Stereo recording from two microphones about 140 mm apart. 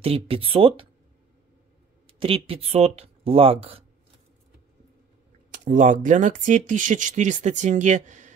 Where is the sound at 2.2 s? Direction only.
40° right (ahead or behind).